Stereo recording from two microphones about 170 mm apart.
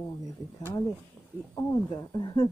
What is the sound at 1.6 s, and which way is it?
Speech, 20° left (ahead or behind).